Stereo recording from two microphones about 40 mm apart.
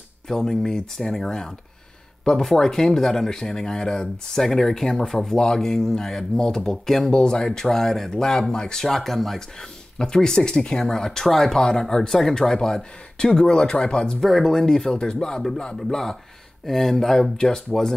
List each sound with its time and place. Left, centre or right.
0.3 s speech: centre
8.8 s speech: centre
9.9 s speech: centre
14.2 s speech: centre